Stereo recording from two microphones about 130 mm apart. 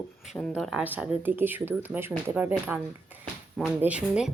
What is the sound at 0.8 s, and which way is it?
Speech, 15° right (ahead or behind).